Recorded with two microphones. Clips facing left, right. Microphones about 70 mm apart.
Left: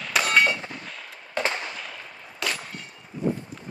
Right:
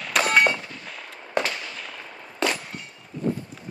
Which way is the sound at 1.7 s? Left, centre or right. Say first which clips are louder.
Even; centre.